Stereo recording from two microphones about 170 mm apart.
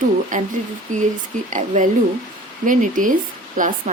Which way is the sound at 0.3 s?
50° right (ahead or behind).